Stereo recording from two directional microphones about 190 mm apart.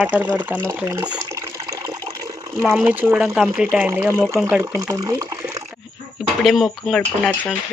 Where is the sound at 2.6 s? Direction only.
5° right (ahead or behind).